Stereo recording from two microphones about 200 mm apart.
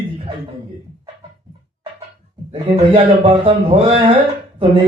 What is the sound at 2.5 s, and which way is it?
Speech, 30° right (ahead or behind).